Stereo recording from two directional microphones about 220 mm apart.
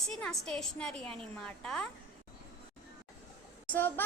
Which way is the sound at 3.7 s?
10° left (ahead or behind).